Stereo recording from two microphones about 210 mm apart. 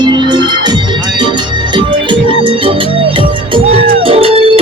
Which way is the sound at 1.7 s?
25° right (ahead or behind).